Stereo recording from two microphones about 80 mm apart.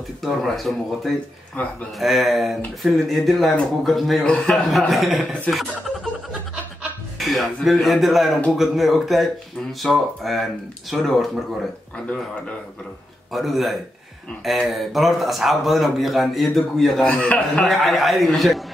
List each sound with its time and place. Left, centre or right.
0.2 s speech: centre
1.6 s speech: centre
2.0 s speech: centre
4.2 s speech: centre
4.7 s speech: centre
5.5 s chuckle: centre
7.2 s speech: centre
13.3 s speech: centre
17.6 s speech: centre